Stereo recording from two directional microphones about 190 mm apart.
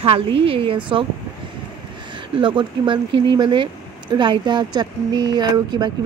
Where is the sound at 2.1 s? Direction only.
25° right (ahead or behind).